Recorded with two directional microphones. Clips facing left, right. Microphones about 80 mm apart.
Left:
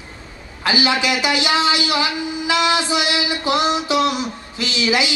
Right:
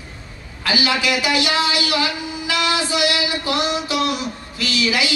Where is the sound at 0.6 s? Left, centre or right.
Left.